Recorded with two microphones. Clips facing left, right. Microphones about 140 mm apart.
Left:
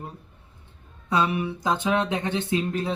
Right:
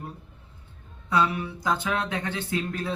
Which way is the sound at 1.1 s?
20° left (ahead or behind).